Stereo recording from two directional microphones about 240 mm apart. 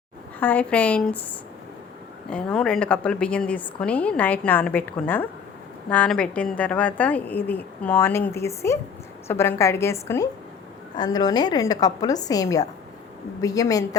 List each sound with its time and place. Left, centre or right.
0.3 s a woman's voice: centre
2.3 s a woman's voice: centre